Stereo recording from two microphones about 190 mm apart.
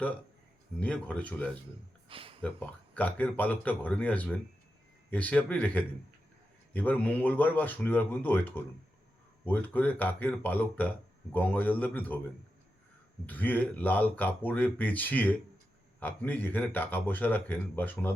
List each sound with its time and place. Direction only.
0.8 s speech: 5° left (ahead or behind)
2.0 s a sound: 30° right (ahead or behind)
2.4 s speech: 10° left (ahead or behind)
13.2 s speech: 10° left (ahead or behind)